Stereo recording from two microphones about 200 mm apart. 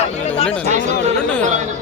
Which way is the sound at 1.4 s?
35° right (ahead or behind).